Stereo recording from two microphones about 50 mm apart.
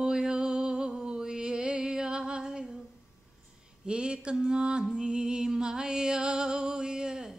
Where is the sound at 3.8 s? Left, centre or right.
Centre.